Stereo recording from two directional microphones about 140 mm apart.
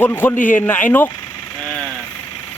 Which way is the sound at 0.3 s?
70° left (ahead or behind).